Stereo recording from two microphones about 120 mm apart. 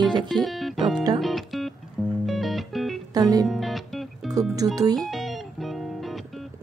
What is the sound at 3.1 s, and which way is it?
Speech, 30° right (ahead or behind).